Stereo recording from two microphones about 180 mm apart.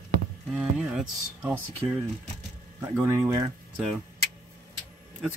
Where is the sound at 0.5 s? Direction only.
5° right (ahead or behind).